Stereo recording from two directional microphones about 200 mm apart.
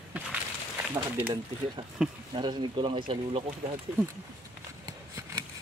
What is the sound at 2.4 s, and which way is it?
Speech, 25° right (ahead or behind).